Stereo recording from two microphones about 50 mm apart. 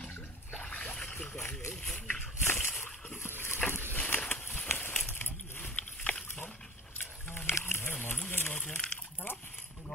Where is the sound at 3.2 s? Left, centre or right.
Left.